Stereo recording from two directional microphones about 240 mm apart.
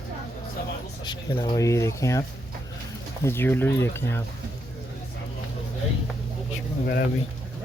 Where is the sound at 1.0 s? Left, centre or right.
Centre.